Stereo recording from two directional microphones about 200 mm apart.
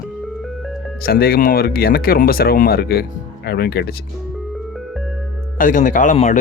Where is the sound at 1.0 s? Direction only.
50° left (ahead or behind).